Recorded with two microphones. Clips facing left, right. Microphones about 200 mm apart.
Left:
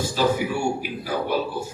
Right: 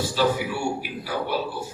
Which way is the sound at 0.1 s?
45° left (ahead or behind).